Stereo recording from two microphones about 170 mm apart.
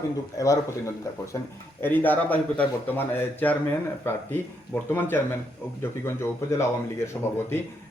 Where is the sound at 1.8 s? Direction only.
10° left (ahead or behind).